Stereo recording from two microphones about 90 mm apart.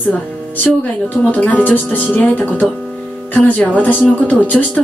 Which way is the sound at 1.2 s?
15° left (ahead or behind).